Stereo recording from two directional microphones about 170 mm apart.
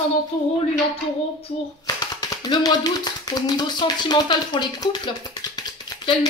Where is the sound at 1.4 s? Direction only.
25° left (ahead or behind).